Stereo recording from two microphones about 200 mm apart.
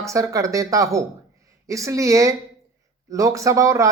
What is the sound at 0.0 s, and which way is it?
Speech, 15° right (ahead or behind).